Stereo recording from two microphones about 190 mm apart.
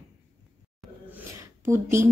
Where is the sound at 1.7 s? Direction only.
15° right (ahead or behind).